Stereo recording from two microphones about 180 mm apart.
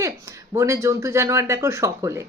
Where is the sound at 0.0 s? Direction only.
15° right (ahead or behind).